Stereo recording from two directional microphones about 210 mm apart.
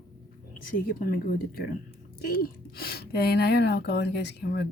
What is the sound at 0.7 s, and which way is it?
Speech, 45° left (ahead or behind).